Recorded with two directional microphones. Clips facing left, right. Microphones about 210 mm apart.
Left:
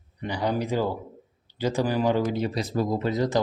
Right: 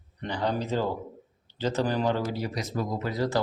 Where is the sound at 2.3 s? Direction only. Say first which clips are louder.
Left 5 dB; 25° left (ahead or behind).